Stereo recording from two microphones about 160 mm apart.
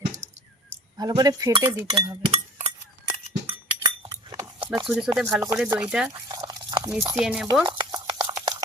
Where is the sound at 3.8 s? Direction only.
25° right (ahead or behind).